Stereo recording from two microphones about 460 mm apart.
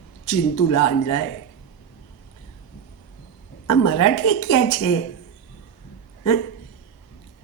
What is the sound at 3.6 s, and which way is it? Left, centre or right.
A woman's voice, left.